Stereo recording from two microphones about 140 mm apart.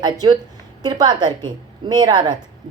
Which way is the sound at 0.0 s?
30° right (ahead or behind).